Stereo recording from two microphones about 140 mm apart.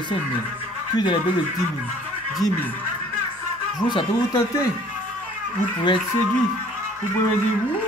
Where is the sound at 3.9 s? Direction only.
35° left (ahead or behind).